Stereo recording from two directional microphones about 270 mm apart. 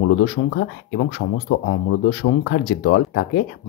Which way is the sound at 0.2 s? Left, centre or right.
Left.